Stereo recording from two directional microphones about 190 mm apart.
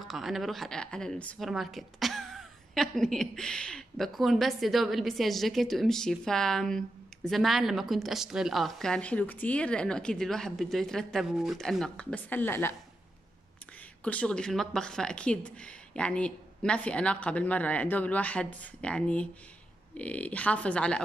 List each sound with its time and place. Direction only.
0.1 s a woman's voice: centre (ahead or behind)
14.0 s a woman's voice: 5° left (ahead or behind)